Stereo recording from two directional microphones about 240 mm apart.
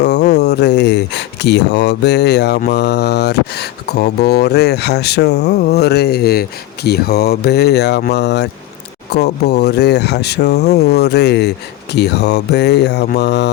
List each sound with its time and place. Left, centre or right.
0.0 s speech: left